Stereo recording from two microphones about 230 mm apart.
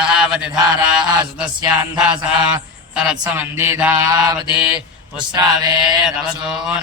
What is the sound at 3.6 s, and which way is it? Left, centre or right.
Mantra, centre.